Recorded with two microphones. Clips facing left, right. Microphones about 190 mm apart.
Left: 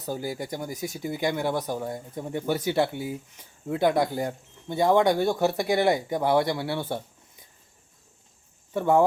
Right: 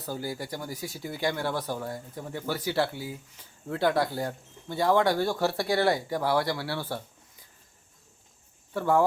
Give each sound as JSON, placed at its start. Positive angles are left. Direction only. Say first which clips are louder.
{"t": 0.0, "sound": "speech", "louder": "left 3 dB", "side_deg": 20}
{"t": 8.7, "sound": "speech", "louder": "left 3 dB", "side_deg": 20}